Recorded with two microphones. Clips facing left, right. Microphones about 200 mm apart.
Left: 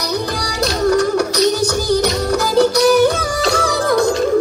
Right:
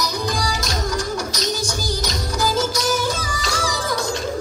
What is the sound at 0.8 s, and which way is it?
Music, 65° left (ahead or behind).